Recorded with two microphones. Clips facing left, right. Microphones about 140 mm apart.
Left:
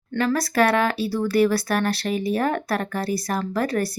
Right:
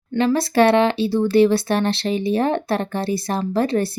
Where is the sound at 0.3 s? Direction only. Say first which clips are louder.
Right 5 dB; 25° right (ahead or behind).